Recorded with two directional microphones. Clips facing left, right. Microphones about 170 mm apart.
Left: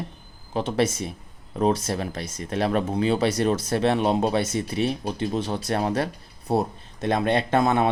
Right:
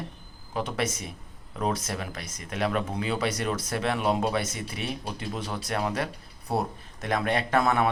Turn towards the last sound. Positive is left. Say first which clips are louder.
# left 3 dB
turn(degrees=25)  # may be behind; listen again after turning